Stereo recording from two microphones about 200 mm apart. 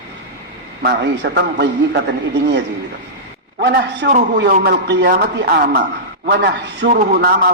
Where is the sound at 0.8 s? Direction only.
60° right (ahead or behind).